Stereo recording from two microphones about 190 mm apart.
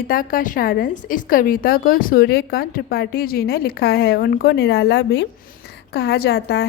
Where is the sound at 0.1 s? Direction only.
45° left (ahead or behind).